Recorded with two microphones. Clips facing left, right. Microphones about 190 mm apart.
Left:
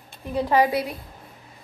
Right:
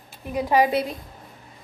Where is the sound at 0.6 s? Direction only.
25° right (ahead or behind).